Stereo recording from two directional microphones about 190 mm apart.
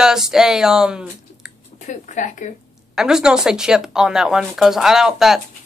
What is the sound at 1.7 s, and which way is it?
Speech, 40° left (ahead or behind).